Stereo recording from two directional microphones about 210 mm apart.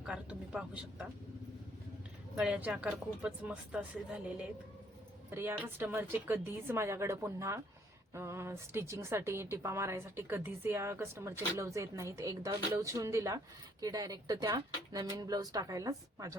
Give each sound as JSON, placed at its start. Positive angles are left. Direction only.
{"t": 0.0, "sound": "speech", "side_deg": -5}
{"t": 2.3, "sound": "a woman's voice", "side_deg": -5}